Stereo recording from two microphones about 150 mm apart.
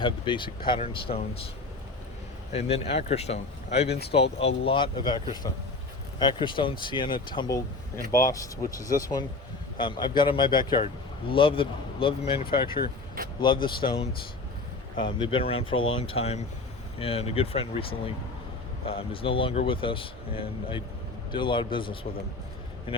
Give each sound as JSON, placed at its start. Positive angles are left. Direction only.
{"t": 0.0, "sound": "speech", "side_deg": 35}
{"t": 2.5, "sound": "speech", "side_deg": 45}
{"t": 22.9, "sound": "a sound", "side_deg": 35}